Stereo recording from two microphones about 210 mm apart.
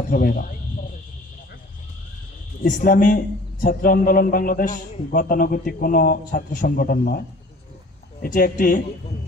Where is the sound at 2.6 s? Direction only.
40° left (ahead or behind).